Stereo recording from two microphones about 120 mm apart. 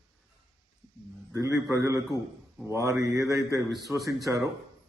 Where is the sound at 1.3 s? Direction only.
25° right (ahead or behind).